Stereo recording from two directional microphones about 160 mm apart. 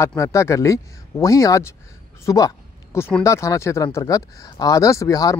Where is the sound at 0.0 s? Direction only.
15° left (ahead or behind).